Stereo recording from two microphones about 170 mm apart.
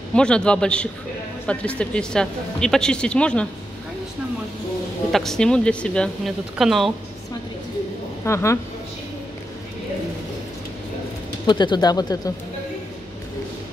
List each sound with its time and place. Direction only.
0.1 s speech: 5° left (ahead or behind)
5.1 s speech: centre (ahead or behind)
8.3 s a woman's voice: 15° left (ahead or behind)
11.4 s speech: 25° left (ahead or behind)